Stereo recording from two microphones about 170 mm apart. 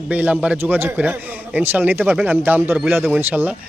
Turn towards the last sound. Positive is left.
turn(degrees=-10)  # may be behind; listen again after turning